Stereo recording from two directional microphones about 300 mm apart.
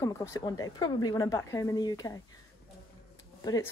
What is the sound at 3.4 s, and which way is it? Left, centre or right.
Speech, centre.